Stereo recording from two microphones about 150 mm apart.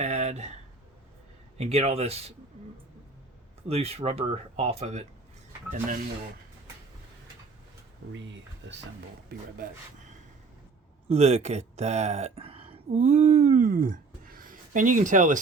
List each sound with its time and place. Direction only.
0.0 s a sound: 50° right (ahead or behind)
1.5 s speech: 45° right (ahead or behind)
3.7 s speech: 45° right (ahead or behind)
9.3 s speech: 75° right (ahead or behind)
11.1 s speech: 45° right (ahead or behind)